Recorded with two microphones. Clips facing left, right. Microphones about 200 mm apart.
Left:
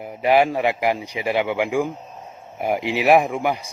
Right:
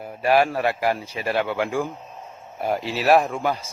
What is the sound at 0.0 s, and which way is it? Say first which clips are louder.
Speech: left 2 dB; 15° left (ahead or behind).